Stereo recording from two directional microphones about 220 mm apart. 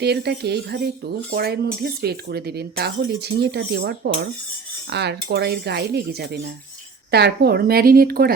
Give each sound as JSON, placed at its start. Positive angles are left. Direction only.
{"t": 0.0, "sound": "speech", "side_deg": -50}